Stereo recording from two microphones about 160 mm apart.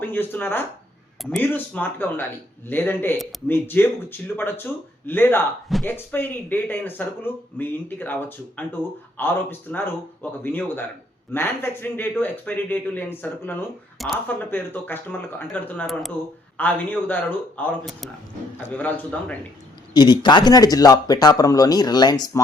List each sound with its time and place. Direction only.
0.0 s speech: 15° left (ahead or behind)
14.0 s speech: centre (ahead or behind)
14.3 s speech: 10° left (ahead or behind)
16.6 s speech: 10° left (ahead or behind)
18.7 s speech: 10° left (ahead or behind)
19.9 s speech: 25° left (ahead or behind)